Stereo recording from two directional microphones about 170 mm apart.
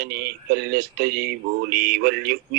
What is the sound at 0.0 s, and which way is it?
Speech, 65° right (ahead or behind).